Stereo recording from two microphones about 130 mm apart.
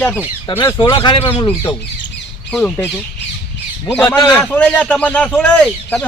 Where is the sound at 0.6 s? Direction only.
30° left (ahead or behind).